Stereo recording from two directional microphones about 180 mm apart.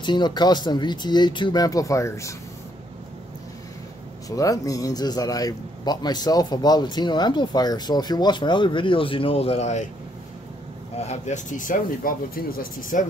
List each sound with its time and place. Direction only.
0.0 s a man's voice: 25° left (ahead or behind)
4.3 s a man's voice: 20° left (ahead or behind); by 9.8 s 40° left (ahead or behind)
11.0 s speech: 40° left (ahead or behind)